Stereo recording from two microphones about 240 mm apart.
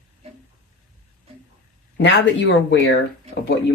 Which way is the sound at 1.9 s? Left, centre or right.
Left.